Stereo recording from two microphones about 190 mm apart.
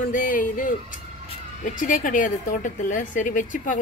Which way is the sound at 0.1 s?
45° left (ahead or behind).